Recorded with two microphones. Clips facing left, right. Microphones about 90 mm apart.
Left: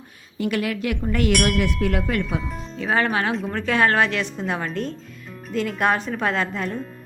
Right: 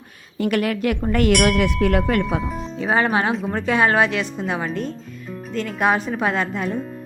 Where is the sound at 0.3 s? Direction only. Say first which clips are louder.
Right 3 dB; 55° right (ahead or behind).